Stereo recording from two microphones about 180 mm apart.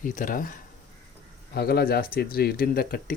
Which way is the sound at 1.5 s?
60° left (ahead or behind).